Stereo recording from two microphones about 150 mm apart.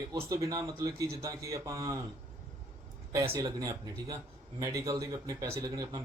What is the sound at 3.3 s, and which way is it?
Speech, 20° right (ahead or behind).